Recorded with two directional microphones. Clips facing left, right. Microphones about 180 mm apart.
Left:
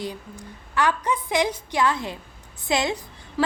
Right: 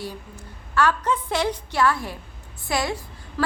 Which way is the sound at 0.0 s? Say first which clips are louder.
Left 2 dB; 15° left (ahead or behind).